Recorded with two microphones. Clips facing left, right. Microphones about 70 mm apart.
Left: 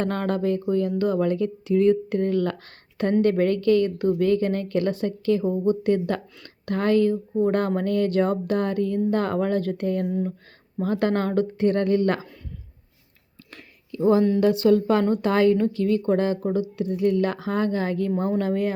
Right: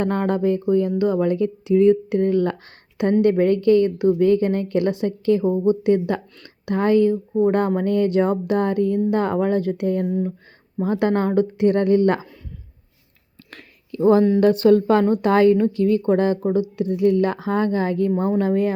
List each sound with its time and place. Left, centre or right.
0.0 s speech: right
10.1 s speech: centre
10.8 s speech: right
13.5 s a sound: right
14.3 s a woman's voice: right
15.0 s a woman's voice: right